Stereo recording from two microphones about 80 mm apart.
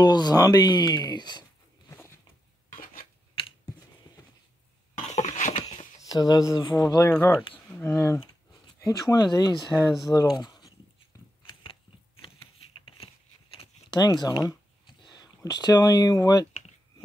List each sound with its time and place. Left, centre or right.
0.0 s speech: left
6.0 s speech: left
7.1 s speech: left
8.8 s speech: left
9.8 s speech: centre
10.3 s a sound: left
13.8 s speech: left